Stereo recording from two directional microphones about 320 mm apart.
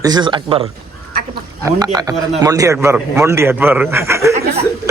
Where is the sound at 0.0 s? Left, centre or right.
Centre.